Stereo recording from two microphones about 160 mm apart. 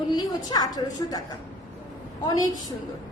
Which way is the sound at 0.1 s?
25° left (ahead or behind).